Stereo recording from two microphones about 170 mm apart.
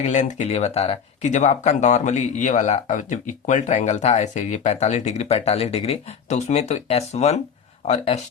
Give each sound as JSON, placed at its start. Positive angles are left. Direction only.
{"t": 0.0, "sound": "speech", "side_deg": 45}